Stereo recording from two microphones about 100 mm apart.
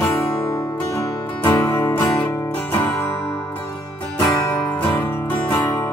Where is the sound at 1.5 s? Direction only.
20° left (ahead or behind).